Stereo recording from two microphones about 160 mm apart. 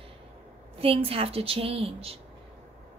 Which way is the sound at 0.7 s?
35° right (ahead or behind).